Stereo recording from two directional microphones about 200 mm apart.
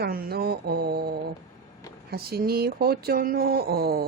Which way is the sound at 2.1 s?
50° right (ahead or behind).